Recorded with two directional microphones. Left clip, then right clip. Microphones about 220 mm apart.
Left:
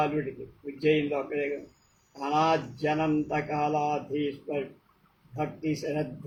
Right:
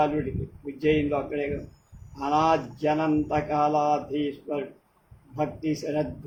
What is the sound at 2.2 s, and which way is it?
Speech, 15° right (ahead or behind).